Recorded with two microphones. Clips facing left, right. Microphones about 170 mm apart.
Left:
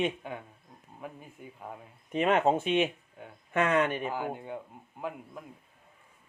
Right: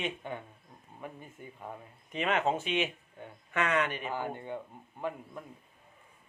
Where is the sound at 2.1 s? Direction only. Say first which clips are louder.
Left 5 dB; 50° left (ahead or behind).